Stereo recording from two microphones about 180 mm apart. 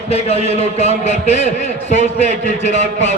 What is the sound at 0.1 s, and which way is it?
A man's voice, 35° left (ahead or behind).